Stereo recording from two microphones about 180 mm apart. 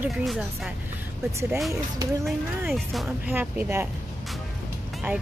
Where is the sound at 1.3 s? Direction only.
15° right (ahead or behind).